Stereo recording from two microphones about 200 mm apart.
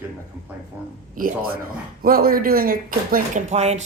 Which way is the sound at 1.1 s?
45° right (ahead or behind).